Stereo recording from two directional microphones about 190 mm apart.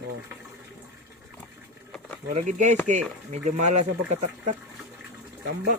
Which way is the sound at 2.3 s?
40° right (ahead or behind).